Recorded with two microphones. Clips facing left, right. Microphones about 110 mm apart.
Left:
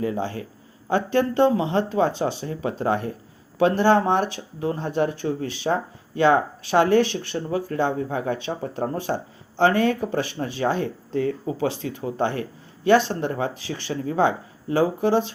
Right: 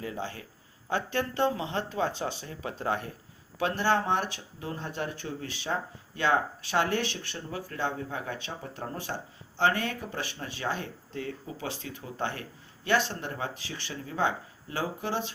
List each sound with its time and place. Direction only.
0.0 s speech: 35° left (ahead or behind)